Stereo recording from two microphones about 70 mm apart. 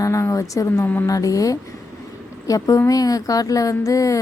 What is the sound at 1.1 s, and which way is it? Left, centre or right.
A woman's voice, left.